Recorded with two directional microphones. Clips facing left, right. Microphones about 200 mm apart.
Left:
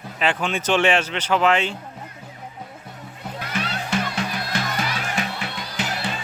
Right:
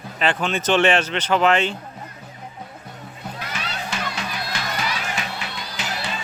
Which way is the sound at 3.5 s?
55° left (ahead or behind).